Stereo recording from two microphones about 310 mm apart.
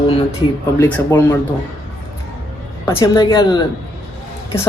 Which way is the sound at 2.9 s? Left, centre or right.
Centre.